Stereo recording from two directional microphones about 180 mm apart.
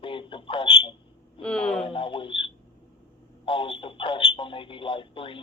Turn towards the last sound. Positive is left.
turn(degrees=30)  # may be behind; listen again after turning